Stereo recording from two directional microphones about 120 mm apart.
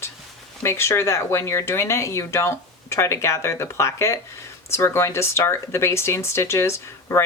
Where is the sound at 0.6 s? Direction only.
25° left (ahead or behind).